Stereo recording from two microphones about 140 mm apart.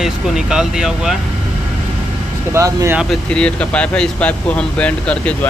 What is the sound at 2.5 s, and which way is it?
Speech, 20° right (ahead or behind).